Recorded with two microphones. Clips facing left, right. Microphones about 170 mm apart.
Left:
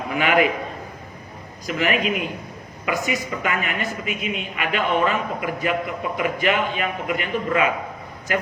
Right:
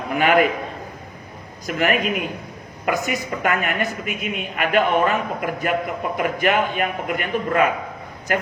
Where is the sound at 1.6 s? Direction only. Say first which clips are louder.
Right 1 dB; 50° right (ahead or behind).